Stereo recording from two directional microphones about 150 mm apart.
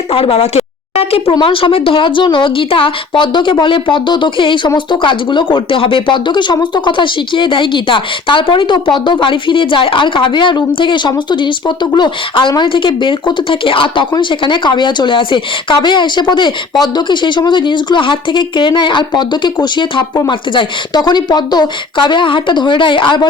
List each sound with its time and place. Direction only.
0.1 s speech: 40° left (ahead or behind)